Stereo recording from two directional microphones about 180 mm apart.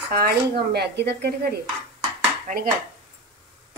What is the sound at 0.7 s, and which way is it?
Speech, 65° right (ahead or behind).